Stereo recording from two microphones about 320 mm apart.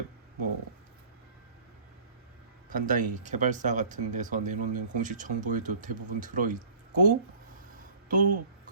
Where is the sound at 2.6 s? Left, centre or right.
Right.